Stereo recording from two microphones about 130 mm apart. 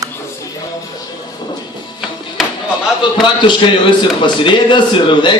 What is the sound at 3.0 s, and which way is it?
A man's voice, 40° left (ahead or behind).